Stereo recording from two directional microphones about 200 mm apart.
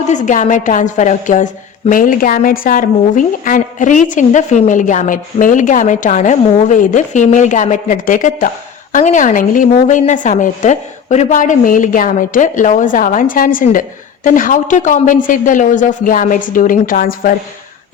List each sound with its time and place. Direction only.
0.0 s a woman's voice: 35° left (ahead or behind)